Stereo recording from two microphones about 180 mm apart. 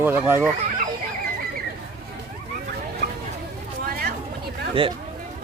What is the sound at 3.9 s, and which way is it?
Chatter, 60° right (ahead or behind).